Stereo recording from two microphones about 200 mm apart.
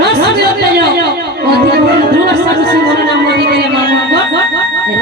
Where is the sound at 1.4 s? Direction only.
50° right (ahead or behind).